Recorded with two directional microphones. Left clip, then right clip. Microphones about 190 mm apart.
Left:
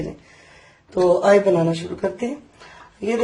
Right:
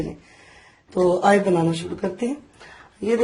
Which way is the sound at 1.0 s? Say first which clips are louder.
Left 3 dB; 55° right (ahead or behind).